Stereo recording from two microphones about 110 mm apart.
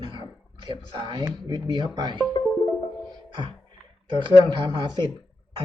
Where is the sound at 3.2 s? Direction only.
45° right (ahead or behind).